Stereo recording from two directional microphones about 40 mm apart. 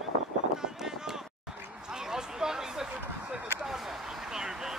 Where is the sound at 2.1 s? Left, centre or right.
Centre.